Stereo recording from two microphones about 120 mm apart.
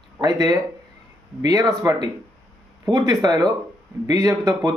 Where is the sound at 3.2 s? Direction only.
30° right (ahead or behind).